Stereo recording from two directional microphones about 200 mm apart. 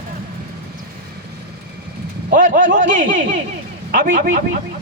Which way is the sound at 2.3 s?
40° right (ahead or behind).